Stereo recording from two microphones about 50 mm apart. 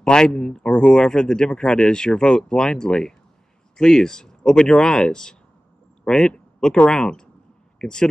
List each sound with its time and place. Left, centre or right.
0.0 s a man's voice: centre